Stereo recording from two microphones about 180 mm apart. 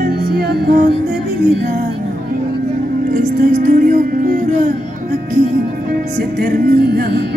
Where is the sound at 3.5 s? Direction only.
50° right (ahead or behind).